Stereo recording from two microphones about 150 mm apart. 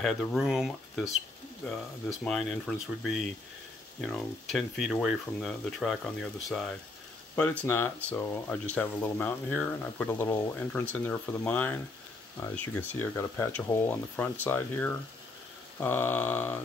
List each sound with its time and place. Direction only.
0.0 s speech: centre (ahead or behind)
2.2 s speech: centre (ahead or behind)
7.6 s speech: 15° left (ahead or behind)